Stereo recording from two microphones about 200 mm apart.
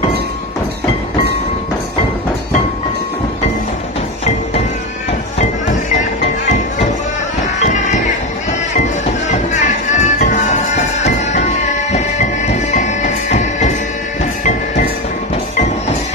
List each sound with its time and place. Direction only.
9.5 s music: 35° left (ahead or behind)